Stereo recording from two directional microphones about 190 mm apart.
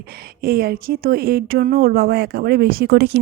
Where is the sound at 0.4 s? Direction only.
50° right (ahead or behind).